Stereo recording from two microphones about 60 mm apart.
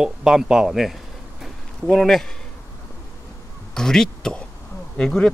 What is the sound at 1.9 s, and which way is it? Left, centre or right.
Speech, centre.